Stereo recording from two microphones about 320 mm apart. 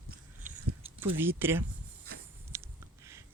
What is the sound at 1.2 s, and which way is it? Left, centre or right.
Speech, centre.